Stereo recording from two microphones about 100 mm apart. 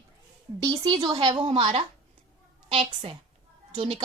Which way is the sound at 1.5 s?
70° right (ahead or behind).